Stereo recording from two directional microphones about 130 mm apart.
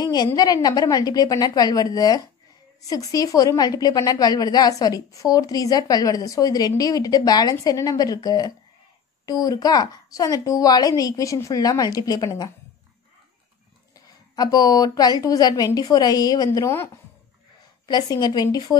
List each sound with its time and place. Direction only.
0.0 s a sound: 30° left (ahead or behind)
0.4 s a woman's voice: 30° left (ahead or behind)
14.3 s a woman's voice: 30° left (ahead or behind)
16.5 s a woman's voice: 20° left (ahead or behind)
17.8 s speech: 30° left (ahead or behind)